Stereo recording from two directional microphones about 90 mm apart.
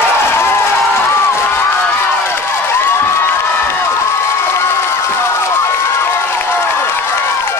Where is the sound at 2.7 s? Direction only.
25° left (ahead or behind).